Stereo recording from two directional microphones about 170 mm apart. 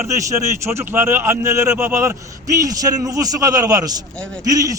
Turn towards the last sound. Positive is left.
turn(degrees=-20)  # may be behind; listen again after turning